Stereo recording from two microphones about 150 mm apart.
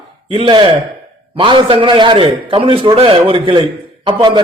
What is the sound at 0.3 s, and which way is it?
A man's voice, 35° right (ahead or behind).